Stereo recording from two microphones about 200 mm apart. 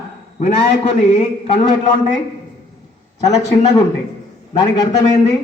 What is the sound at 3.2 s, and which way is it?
A man's voice, 20° left (ahead or behind).